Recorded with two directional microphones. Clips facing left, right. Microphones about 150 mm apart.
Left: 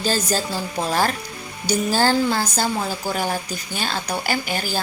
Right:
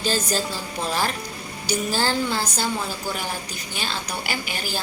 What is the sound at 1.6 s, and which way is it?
A woman's voice, 40° left (ahead or behind).